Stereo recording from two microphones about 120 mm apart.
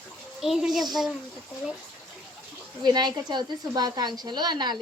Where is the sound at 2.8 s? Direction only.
35° right (ahead or behind).